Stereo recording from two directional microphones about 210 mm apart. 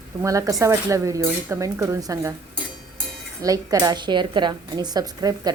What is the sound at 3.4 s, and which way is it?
A woman's voice, 15° right (ahead or behind).